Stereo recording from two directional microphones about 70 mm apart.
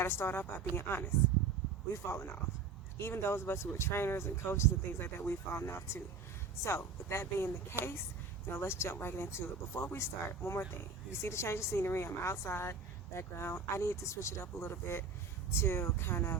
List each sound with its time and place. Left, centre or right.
0.0 s speech: left